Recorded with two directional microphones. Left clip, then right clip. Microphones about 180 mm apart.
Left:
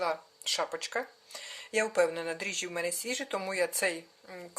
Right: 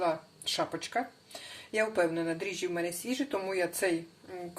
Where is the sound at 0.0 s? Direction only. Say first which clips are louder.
Right 1 dB; 60° left (ahead or behind).